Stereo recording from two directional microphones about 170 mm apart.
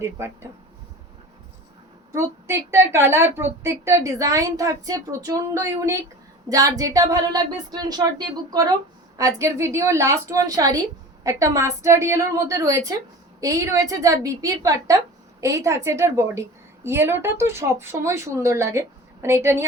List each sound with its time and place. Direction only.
2.1 s a woman's voice: 15° right (ahead or behind)